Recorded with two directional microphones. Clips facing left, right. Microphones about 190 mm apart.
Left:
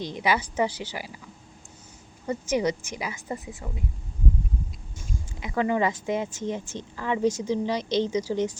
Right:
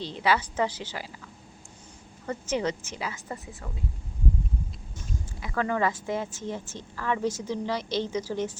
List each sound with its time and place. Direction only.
0.0 s speech: 15° left (ahead or behind)
2.2 s speech: 15° left (ahead or behind)
4.9 s speech: 20° left (ahead or behind)